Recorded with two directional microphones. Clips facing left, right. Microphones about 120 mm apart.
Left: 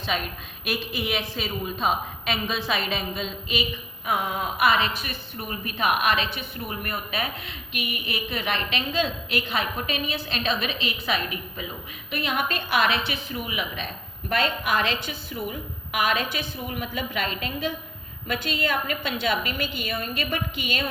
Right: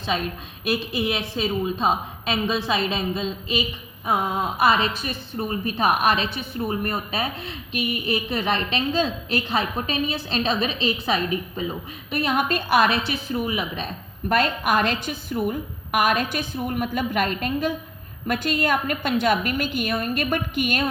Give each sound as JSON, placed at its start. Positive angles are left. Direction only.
{"t": 0.6, "sound": "a woman's voice", "side_deg": -30}